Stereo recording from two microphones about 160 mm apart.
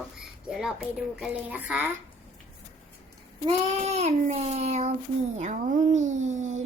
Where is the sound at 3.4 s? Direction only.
40° right (ahead or behind).